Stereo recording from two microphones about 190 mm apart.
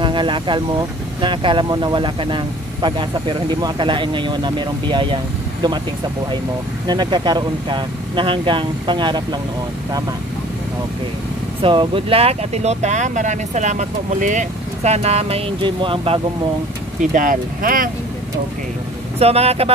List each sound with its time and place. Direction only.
0.0 s speech: 25° right (ahead or behind)
6.9 s speech: 20° right (ahead or behind)
11.6 s speech: 25° right (ahead or behind)
17.0 s speech: 45° right (ahead or behind)
19.1 s speech: 30° right (ahead or behind)